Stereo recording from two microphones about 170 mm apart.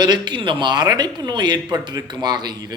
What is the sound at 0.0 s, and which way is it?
A man's voice, 25° right (ahead or behind).